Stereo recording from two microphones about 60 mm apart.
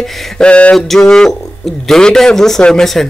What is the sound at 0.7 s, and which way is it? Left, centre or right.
A man's voice, centre.